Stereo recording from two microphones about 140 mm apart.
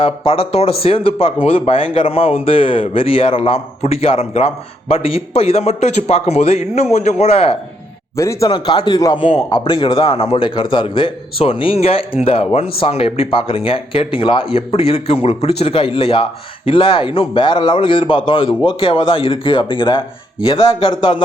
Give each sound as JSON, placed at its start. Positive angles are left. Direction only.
{"t": 0.0, "sound": "speech", "side_deg": 40}
{"t": 8.1, "sound": "a man's voice", "side_deg": 20}
{"t": 8.4, "sound": "speech", "side_deg": 30}
{"t": 10.5, "sound": "speech", "side_deg": 35}